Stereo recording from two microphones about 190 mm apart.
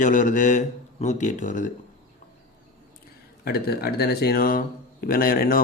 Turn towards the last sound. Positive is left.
turn(degrees=50)  # may be behind; listen again after turning